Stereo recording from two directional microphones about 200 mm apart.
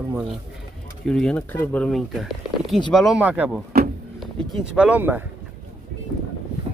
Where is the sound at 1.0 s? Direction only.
5° left (ahead or behind).